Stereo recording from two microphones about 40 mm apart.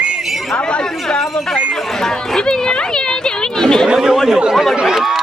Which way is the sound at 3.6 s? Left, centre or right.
Centre.